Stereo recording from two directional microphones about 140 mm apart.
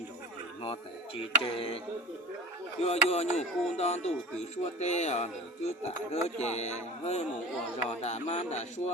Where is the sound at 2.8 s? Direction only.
50° left (ahead or behind).